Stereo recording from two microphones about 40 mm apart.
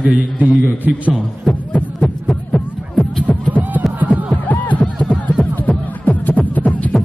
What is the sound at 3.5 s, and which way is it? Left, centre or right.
Music, right.